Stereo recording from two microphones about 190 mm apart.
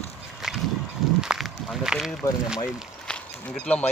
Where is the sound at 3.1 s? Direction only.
5° left (ahead or behind).